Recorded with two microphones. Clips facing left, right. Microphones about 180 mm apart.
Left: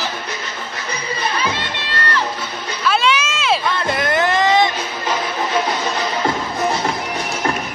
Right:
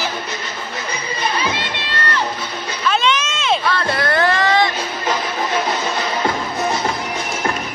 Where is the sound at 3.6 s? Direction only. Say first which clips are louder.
Even; 20° left (ahead or behind).